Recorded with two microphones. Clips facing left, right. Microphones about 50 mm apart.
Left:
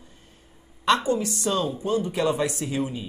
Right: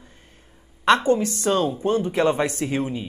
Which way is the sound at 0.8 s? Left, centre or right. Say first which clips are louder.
Right 4 dB; right.